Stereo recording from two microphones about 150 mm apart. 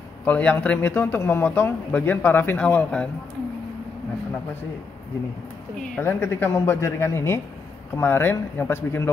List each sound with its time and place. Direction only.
0.2 s speech: 10° left (ahead or behind)
5.8 s speech: 15° left (ahead or behind)